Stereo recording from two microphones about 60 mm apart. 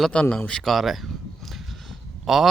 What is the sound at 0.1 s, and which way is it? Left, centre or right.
Speech, centre.